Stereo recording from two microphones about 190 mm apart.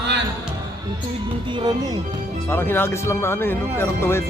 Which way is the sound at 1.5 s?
25° right (ahead or behind).